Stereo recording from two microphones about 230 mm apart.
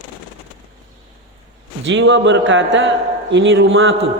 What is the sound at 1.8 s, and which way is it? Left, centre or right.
A man's voice, right.